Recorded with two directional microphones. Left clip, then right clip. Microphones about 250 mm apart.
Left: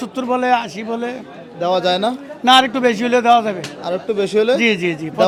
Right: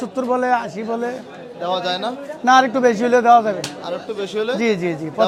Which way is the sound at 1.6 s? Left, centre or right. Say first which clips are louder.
Left 5 dB; left.